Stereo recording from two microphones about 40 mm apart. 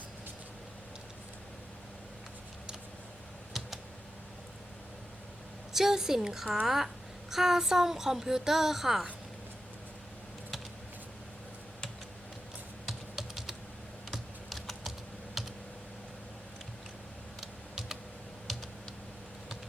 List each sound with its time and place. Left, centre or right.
5.7 s speech: centre
12.9 s computer keyboard: centre
14.1 s typing: centre
15.4 s computer keyboard: centre
17.4 s typing: centre